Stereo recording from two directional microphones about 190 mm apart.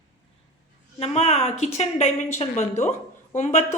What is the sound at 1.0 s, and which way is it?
A woman's voice, 35° left (ahead or behind).